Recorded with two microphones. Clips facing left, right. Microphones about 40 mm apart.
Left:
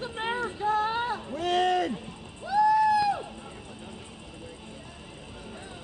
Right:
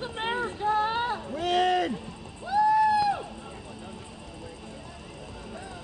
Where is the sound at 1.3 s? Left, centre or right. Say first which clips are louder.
Right 1 dB; centre.